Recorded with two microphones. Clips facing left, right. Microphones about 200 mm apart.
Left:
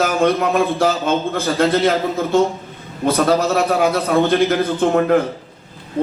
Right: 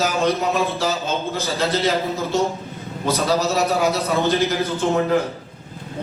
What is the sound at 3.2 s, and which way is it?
A man's voice, 55° left (ahead or behind).